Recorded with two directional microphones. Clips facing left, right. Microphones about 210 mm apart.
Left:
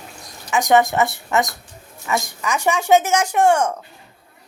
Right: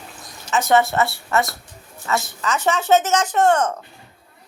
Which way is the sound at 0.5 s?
15° left (ahead or behind).